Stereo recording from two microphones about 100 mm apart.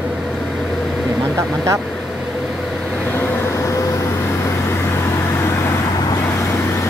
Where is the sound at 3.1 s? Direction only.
30° left (ahead or behind).